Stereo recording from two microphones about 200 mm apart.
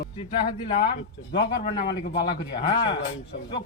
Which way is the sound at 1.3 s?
35° left (ahead or behind).